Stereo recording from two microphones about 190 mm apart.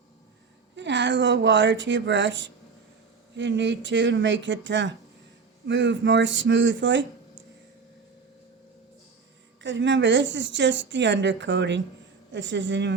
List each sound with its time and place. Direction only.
0.8 s speech: 70° right (ahead or behind)
9.6 s speech: 75° right (ahead or behind)